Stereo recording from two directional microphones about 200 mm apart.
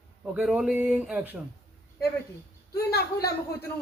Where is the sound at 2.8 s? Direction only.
50° left (ahead or behind).